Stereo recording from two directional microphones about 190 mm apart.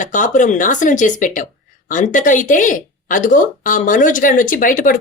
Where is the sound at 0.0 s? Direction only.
40° left (ahead or behind).